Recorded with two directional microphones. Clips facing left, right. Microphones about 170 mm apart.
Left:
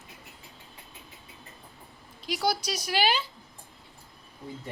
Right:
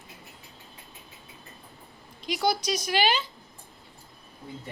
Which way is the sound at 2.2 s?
5° left (ahead or behind).